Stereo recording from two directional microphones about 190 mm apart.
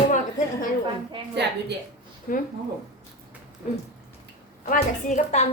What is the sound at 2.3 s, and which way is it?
Speech, 45° left (ahead or behind).